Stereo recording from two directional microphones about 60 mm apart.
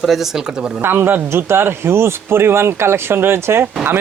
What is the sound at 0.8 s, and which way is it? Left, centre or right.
Speech, right.